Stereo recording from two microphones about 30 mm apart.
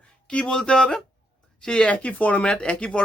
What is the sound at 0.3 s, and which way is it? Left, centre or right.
Speech, left.